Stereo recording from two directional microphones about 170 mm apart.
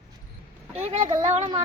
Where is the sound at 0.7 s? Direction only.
40° right (ahead or behind).